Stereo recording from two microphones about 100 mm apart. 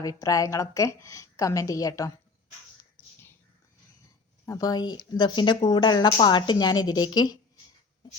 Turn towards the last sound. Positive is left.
turn(degrees=45)  # may be behind; listen again after turning